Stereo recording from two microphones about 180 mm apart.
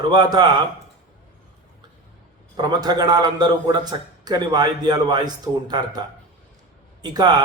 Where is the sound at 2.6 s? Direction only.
20° right (ahead or behind).